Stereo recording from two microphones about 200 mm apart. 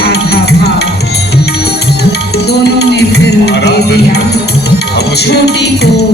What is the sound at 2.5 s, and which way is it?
Music, 55° left (ahead or behind).